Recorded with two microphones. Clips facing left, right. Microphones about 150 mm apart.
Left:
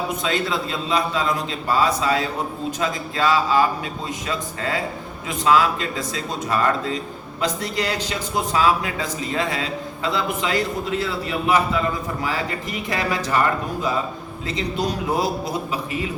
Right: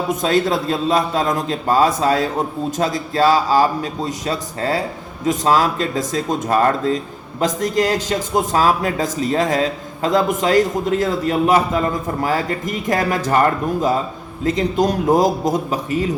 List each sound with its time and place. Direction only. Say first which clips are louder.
0.2 s a man's voice: right 6 dB; 45° right (ahead or behind)
14.4 s a man's voice: right 8 dB; 45° right (ahead or behind)